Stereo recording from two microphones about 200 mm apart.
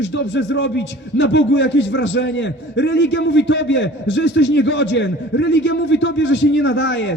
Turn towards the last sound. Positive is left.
turn(degrees=65)  # may be behind; listen again after turning